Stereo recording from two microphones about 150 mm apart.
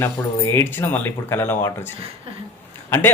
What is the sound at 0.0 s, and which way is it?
A man's voice, 15° left (ahead or behind).